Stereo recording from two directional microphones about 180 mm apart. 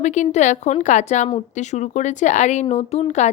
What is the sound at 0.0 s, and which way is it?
Speech, 40° left (ahead or behind).